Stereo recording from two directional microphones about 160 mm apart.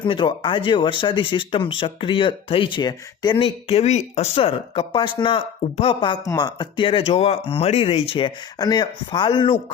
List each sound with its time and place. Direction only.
0.0 s speech: 30° left (ahead or behind)